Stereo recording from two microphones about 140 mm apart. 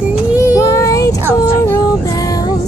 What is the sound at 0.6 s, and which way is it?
Vehicle, 25° left (ahead or behind).